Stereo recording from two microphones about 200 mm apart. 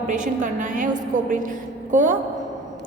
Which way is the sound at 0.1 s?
40° right (ahead or behind).